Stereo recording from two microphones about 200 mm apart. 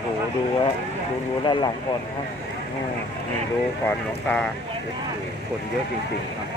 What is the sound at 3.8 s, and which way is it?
Speech, 10° left (ahead or behind).